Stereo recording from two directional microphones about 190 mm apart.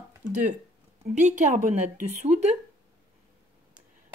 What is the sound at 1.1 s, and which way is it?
Speech, 40° right (ahead or behind).